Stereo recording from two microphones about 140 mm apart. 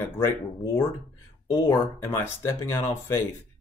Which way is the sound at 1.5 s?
20° left (ahead or behind).